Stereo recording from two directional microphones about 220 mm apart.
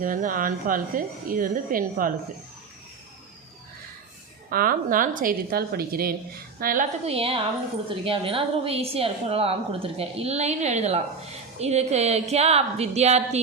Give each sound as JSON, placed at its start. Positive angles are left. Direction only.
{"t": 0.0, "sound": "speech", "side_deg": -35}
{"t": 4.4, "sound": "speech", "side_deg": -40}
{"t": 7.0, "sound": "a woman's voice", "side_deg": -25}